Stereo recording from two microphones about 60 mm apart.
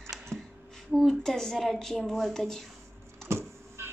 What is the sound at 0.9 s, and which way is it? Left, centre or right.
Speech, centre.